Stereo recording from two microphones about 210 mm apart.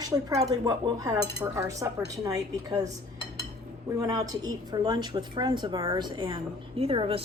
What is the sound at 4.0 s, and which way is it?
A woman's voice, 15° right (ahead or behind).